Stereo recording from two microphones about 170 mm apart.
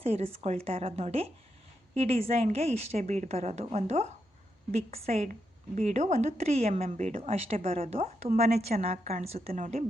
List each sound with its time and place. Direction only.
0.0 s a woman's voice: 35° right (ahead or behind)